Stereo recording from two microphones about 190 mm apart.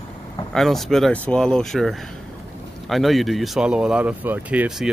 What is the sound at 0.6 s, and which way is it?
Speech, centre (ahead or behind).